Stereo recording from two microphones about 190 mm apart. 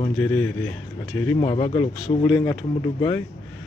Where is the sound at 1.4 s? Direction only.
25° left (ahead or behind).